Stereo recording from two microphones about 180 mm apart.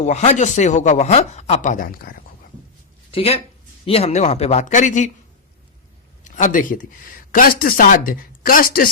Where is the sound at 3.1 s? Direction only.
30° left (ahead or behind).